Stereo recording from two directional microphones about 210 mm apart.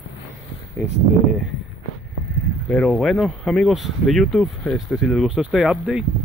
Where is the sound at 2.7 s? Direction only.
Centre (ahead or behind).